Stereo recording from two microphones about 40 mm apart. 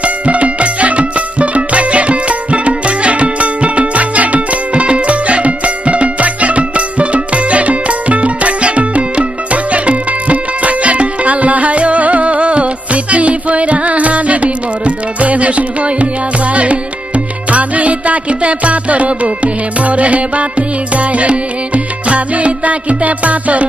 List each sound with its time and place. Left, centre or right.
0.0 s music: right